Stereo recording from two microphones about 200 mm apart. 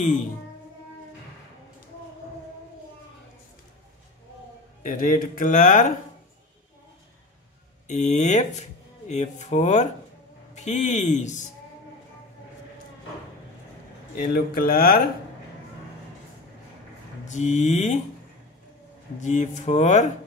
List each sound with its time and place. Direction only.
0.0 s speech: 35° left (ahead or behind)
4.8 s speech: 45° left (ahead or behind)
7.9 s speech: 35° left (ahead or behind)
14.1 s speech: 50° left (ahead or behind)
17.3 s speech: 35° left (ahead or behind)
19.1 s speech: 35° left (ahead or behind)